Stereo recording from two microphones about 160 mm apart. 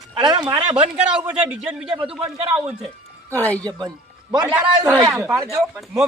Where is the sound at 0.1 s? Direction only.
30° right (ahead or behind).